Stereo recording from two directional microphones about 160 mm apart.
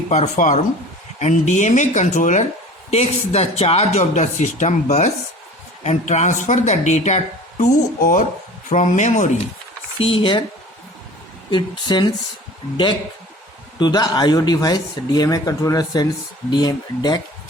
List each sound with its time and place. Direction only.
0.1 s speech: 50° left (ahead or behind)
10.0 s speech: 35° left (ahead or behind)
11.9 s speech: 25° left (ahead or behind)